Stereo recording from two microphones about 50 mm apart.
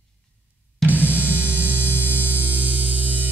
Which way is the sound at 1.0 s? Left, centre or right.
Left.